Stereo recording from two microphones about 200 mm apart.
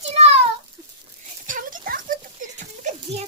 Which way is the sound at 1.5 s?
40° right (ahead or behind).